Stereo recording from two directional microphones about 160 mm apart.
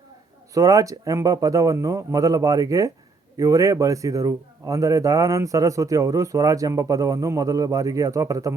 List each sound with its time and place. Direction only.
0.5 s a man's voice: 20° right (ahead or behind)